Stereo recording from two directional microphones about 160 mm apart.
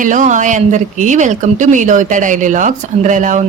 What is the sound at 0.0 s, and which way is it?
Speech, 55° right (ahead or behind).